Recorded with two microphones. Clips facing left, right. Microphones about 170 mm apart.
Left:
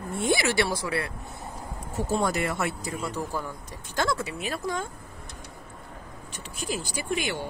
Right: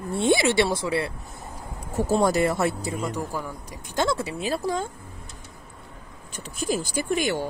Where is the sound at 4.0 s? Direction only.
30° right (ahead or behind).